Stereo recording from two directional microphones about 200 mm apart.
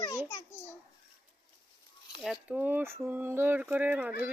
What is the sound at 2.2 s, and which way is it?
Speech, 5° right (ahead or behind).